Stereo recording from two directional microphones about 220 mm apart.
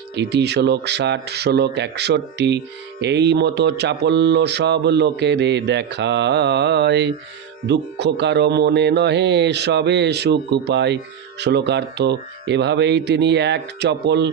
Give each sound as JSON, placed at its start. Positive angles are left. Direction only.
{"t": 0.2, "sound": "speech", "side_deg": -50}